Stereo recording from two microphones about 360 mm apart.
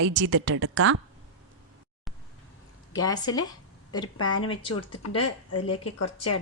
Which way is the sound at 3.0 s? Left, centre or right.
Centre.